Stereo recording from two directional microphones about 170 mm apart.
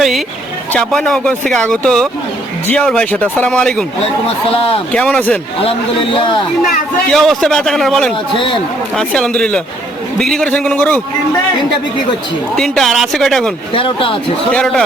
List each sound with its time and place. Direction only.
0.7 s a man's voice: 5° left (ahead or behind)
4.9 s speech: 5° left (ahead or behind)
7.1 s a man's voice: centre (ahead or behind)
12.5 s a man's voice: centre (ahead or behind)
13.7 s speech: 30° left (ahead or behind)
14.5 s a man's voice: 5° left (ahead or behind)